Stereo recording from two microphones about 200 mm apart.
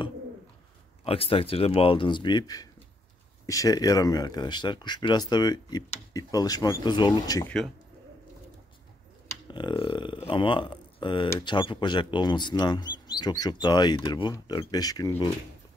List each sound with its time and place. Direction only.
1.0 s speech: 30° left (ahead or behind)
7.4 s speech: centre (ahead or behind)
9.3 s speech: 20° left (ahead or behind)